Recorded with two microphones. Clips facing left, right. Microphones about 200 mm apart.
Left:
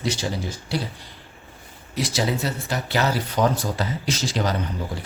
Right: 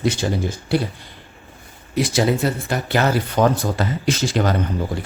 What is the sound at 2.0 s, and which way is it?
Speech, 55° right (ahead or behind).